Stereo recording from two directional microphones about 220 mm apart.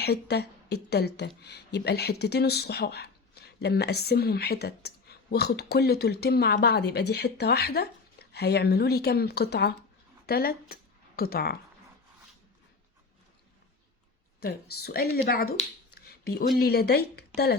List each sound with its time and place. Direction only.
0.0 s speech: 50° left (ahead or behind)
14.4 s speech: 45° left (ahead or behind)
16.0 s a sound: 45° left (ahead or behind)
16.6 s speech: 45° left (ahead or behind)